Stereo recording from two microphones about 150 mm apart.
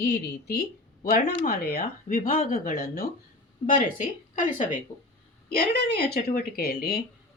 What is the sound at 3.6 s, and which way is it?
Speech, 60° left (ahead or behind).